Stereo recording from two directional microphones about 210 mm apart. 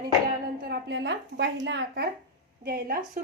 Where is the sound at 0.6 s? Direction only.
50° right (ahead or behind).